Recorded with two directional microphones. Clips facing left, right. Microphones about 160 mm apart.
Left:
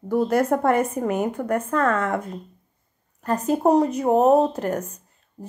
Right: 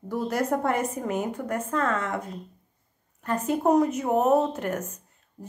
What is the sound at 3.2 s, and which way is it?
Speech, 35° left (ahead or behind).